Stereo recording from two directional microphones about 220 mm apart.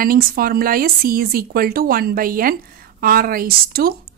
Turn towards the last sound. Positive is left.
turn(degrees=-40)  # may be behind; listen again after turning